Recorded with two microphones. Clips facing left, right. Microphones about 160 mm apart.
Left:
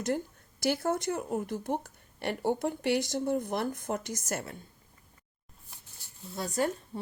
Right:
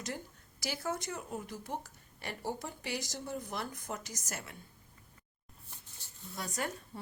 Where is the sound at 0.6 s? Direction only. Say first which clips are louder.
Left 9 dB; 55° left (ahead or behind).